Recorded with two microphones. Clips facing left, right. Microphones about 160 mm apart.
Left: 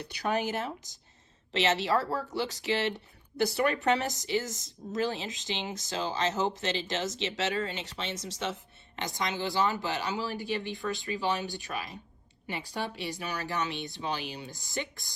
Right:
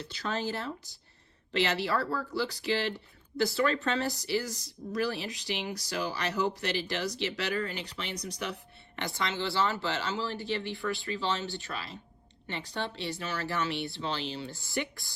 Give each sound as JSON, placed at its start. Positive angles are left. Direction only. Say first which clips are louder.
{"t": 0.0, "sound": "speech", "louder": "left 3 dB", "side_deg": 20}